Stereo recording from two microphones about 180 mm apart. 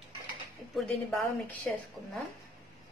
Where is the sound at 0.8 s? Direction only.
Centre (ahead or behind).